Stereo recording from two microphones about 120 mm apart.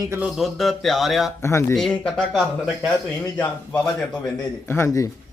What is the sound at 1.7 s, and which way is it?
Speech, 5° left (ahead or behind).